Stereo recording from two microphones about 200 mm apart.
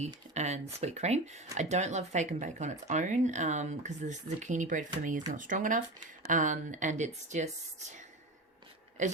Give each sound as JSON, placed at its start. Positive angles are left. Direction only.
{"t": 0.3, "sound": "speech", "side_deg": -35}